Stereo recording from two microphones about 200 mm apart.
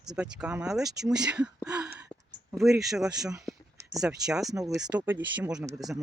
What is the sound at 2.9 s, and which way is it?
Speech, 5° right (ahead or behind).